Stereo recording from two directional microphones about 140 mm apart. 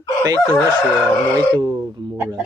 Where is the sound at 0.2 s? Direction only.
25° right (ahead or behind).